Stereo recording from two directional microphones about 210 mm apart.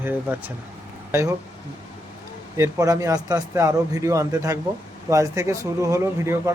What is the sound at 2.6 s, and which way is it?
A man's voice, 15° right (ahead or behind).